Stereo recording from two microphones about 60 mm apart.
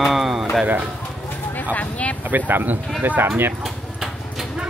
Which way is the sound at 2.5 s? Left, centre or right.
Right.